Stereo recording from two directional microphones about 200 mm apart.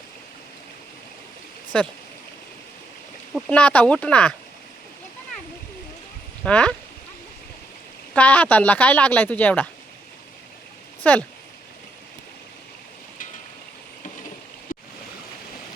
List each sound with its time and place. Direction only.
1.7 s speech: 5° left (ahead or behind)
3.5 s speech: 5° left (ahead or behind)
6.4 s speech: 5° left (ahead or behind)
8.1 s speech: 5° left (ahead or behind)
11.0 s speech: 5° left (ahead or behind)